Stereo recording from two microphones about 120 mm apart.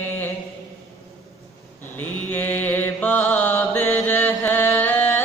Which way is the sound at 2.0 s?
15° left (ahead or behind).